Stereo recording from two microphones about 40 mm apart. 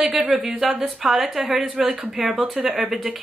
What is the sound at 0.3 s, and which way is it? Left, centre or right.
Speech, centre.